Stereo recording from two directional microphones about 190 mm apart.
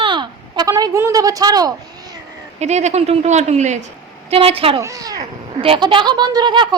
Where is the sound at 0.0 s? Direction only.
25° right (ahead or behind).